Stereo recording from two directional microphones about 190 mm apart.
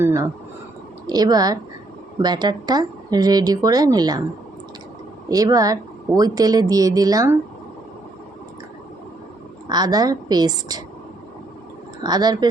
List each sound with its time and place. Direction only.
0.0 s a woman's voice: 15° right (ahead or behind)
5.3 s a woman's voice: 20° right (ahead or behind)
9.6 s a woman's voice: 20° right (ahead or behind)
12.0 s a woman's voice: 20° right (ahead or behind)